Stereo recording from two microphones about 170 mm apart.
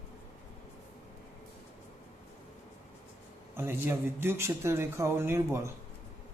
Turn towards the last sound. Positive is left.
turn(degrees=-15)  # may be behind; listen again after turning